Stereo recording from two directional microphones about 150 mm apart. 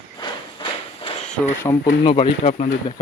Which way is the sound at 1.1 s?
40° left (ahead or behind).